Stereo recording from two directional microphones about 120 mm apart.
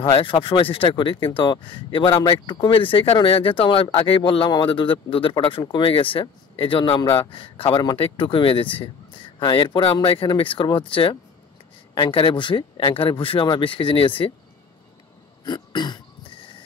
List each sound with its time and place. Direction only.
0.0 s speech: 45° left (ahead or behind)
15.4 s cough: 35° left (ahead or behind)